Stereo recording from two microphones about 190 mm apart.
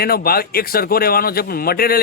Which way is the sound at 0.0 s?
55° left (ahead or behind).